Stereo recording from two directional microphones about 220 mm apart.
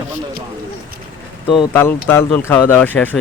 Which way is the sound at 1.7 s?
10° left (ahead or behind).